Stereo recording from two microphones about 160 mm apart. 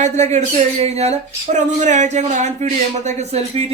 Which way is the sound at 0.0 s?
45° right (ahead or behind).